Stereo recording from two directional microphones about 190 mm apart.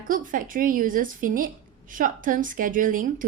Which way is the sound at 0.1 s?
45° right (ahead or behind).